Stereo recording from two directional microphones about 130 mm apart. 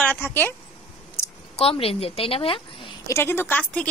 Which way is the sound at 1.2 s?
15° left (ahead or behind).